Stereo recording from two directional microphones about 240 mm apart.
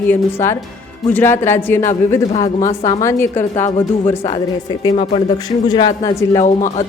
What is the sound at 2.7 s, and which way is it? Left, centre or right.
Speech, left.